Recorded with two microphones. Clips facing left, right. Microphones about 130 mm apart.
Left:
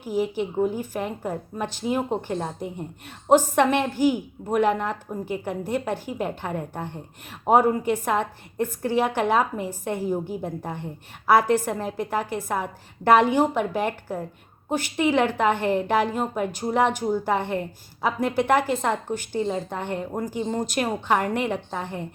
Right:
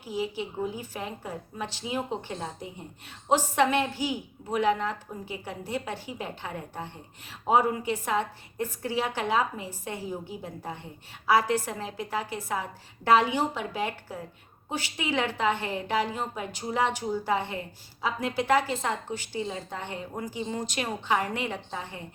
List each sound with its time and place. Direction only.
0.0 s a woman's voice: 50° left (ahead or behind)